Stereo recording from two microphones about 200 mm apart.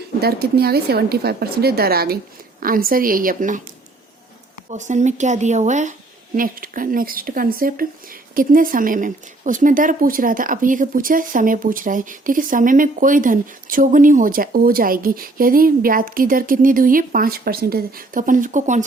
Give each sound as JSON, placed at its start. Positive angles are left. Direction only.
{"t": 0.2, "sound": "speech", "side_deg": -50}
{"t": 4.7, "sound": "speech", "side_deg": -35}